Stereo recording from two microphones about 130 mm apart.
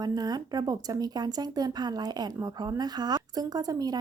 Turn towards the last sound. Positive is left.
turn(degrees=-30)  # may be behind; listen again after turning